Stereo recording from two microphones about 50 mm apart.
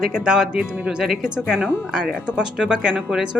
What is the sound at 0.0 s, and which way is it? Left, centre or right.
Speech, centre.